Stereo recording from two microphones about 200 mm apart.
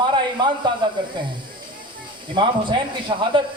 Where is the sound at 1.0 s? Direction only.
25° right (ahead or behind).